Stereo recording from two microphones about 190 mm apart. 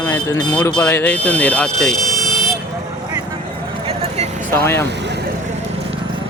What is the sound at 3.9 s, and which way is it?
Vehicle, 35° right (ahead or behind).